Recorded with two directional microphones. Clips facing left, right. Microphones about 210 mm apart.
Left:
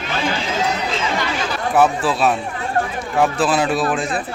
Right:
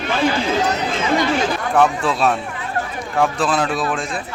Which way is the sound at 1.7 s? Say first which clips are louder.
Left 1 dB; 5° left (ahead or behind).